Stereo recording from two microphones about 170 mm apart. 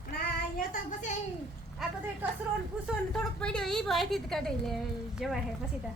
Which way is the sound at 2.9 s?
5° left (ahead or behind).